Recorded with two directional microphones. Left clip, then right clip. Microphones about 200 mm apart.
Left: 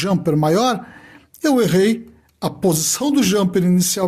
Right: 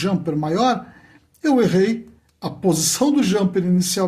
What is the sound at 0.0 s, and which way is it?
Speech, 50° left (ahead or behind).